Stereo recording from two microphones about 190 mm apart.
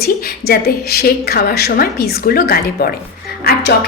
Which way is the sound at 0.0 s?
55° left (ahead or behind).